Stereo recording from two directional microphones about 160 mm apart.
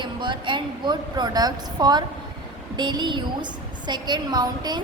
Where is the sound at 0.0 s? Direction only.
30° right (ahead or behind).